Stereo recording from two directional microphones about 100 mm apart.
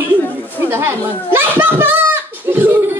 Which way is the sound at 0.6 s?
20° right (ahead or behind).